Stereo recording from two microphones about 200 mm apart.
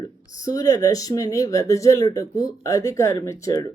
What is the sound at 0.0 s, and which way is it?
Speech, 15° left (ahead or behind).